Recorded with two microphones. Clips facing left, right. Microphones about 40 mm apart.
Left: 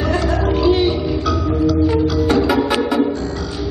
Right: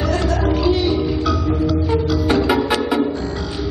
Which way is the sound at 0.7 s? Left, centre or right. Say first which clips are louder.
Left 4 dB; left.